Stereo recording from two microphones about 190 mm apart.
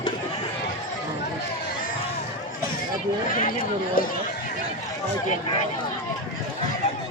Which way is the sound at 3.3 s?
45° left (ahead or behind).